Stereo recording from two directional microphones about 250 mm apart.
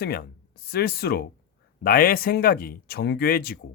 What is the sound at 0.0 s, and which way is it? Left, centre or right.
Speech, left.